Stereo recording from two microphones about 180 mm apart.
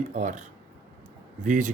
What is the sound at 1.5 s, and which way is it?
Speech, 45° right (ahead or behind).